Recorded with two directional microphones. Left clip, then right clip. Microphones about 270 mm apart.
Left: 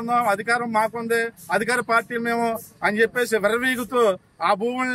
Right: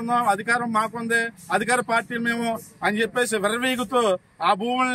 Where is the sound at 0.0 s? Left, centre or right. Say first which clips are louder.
Left 1 dB; centre.